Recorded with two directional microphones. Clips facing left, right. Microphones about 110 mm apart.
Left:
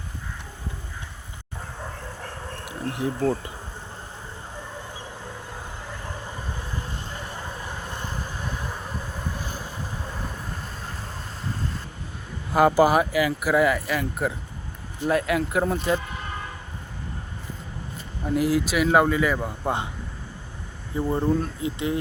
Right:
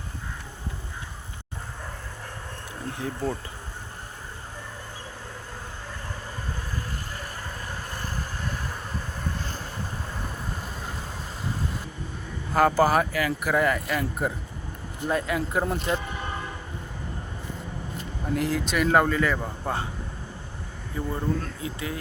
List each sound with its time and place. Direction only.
2.6 s insect: 15° left (ahead or behind)
6.7 s vehicle: 20° left (ahead or behind)
9.4 s vehicle: 10° left (ahead or behind)
12.5 s speech: 10° left (ahead or behind)
18.3 s speech: 5° left (ahead or behind)
21.1 s speech: 20° left (ahead or behind)